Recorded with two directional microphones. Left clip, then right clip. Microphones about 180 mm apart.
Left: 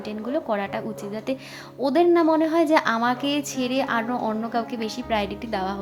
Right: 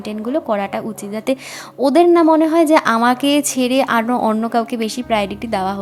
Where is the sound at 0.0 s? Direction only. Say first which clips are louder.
Right 6 dB; 30° right (ahead or behind).